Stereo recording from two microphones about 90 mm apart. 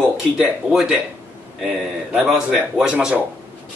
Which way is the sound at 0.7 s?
10° right (ahead or behind).